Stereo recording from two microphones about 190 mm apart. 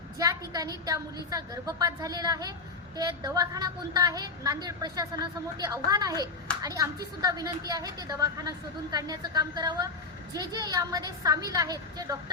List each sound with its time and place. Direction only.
0.2 s speech: 20° right (ahead or behind)